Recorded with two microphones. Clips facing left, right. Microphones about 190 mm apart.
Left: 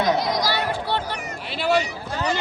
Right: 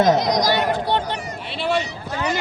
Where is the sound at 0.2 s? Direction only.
20° right (ahead or behind).